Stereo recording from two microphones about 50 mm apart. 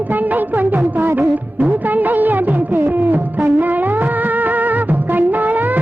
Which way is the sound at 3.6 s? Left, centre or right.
Right.